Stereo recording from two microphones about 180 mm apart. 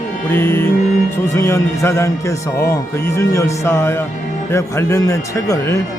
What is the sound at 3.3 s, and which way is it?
A man's voice, 15° left (ahead or behind).